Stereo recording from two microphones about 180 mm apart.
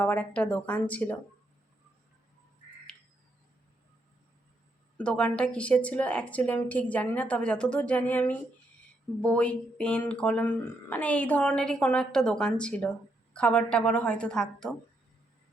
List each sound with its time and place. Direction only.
0.0 s speech: 10° left (ahead or behind)
4.9 s speech: 5° left (ahead or behind)